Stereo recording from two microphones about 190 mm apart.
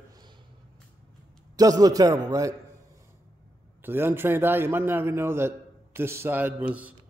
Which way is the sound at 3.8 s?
10° right (ahead or behind).